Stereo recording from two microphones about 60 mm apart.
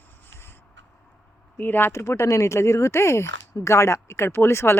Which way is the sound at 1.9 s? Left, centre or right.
Left.